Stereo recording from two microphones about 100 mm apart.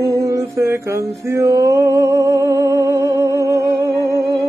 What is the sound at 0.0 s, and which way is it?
Mantra, 30° right (ahead or behind).